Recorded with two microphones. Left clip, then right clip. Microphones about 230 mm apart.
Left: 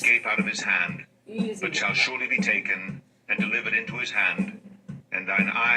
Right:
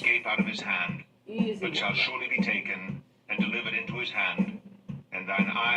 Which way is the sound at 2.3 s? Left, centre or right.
Left.